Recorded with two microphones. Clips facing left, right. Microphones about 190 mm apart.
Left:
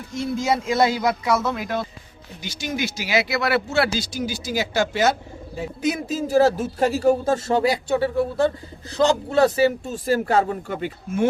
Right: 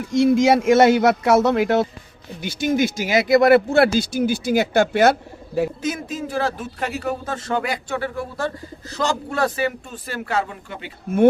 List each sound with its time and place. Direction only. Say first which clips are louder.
0.1 s speech: right 8 dB; 90° right; by 1.9 s 70° right (ahead or behind)
2.4 s speech: right 7 dB; 55° right (ahead or behind)
6.1 s speech: left 7 dB; 40° left (ahead or behind)
9.8 s speech: left 9 dB; 40° left (ahead or behind)